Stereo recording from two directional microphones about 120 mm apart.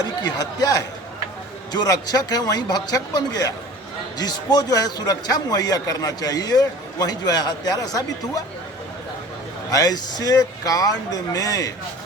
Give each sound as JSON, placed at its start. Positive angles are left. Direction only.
{"t": 0.0, "sound": "a man's voice", "side_deg": 35}
{"t": 9.7, "sound": "speech", "side_deg": 30}